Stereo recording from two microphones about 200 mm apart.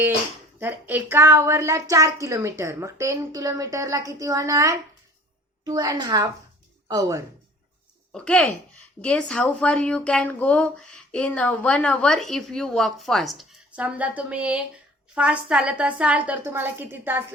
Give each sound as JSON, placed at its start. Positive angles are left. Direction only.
{"t": 0.6, "sound": "a woman's voice", "side_deg": -10}
{"t": 8.1, "sound": "a woman's voice", "side_deg": 5}